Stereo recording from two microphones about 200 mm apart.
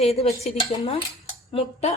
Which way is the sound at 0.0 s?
30° left (ahead or behind).